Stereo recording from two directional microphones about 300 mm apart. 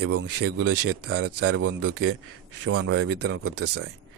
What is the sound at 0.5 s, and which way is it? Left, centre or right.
A man's voice, right.